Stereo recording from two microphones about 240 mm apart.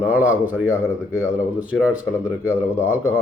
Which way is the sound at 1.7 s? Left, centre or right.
Centre.